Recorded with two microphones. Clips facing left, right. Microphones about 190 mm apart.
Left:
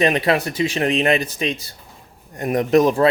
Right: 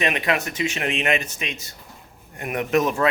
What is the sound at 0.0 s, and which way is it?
Speech, 35° left (ahead or behind).